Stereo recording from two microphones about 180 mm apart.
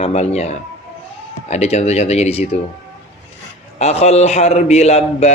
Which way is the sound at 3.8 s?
35° left (ahead or behind).